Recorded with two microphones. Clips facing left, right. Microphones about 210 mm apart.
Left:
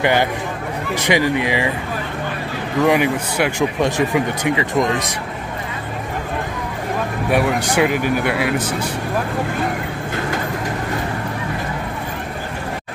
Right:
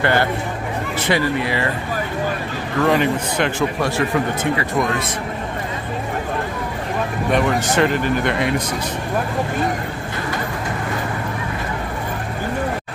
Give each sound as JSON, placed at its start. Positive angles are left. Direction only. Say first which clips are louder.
{"t": 0.0, "sound": "speech", "louder": "left 1 dB", "side_deg": 15}
{"t": 2.8, "sound": "speech", "louder": "left 1 dB", "side_deg": 10}
{"t": 7.2, "sound": "speech", "louder": "left 1 dB", "side_deg": 10}